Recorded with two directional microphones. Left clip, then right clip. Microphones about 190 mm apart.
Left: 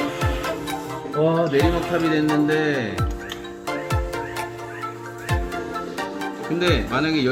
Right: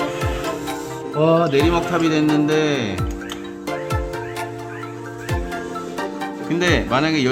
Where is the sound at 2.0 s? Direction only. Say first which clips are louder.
Right 2 dB; 50° right (ahead or behind).